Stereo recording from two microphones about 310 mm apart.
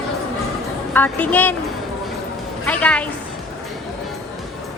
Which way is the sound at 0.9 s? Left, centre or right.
Centre.